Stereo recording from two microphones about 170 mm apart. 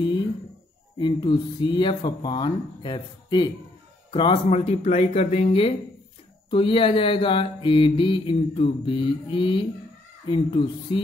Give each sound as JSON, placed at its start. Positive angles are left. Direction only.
{"t": 0.9, "sound": "speech", "side_deg": 30}
{"t": 4.1, "sound": "mantra", "side_deg": 30}
{"t": 10.2, "sound": "speech", "side_deg": 30}